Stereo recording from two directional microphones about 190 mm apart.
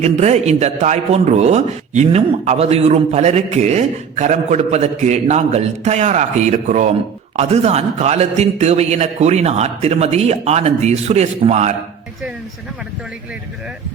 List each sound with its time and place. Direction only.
0.0 s a man's voice: 35° right (ahead or behind)